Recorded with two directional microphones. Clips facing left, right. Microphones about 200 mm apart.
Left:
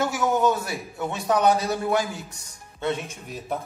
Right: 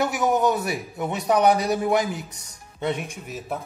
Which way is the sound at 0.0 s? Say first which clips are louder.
Right 1 dB; 20° right (ahead or behind).